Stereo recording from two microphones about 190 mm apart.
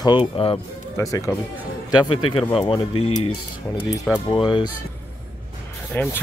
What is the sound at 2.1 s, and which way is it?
Speech, 30° left (ahead or behind).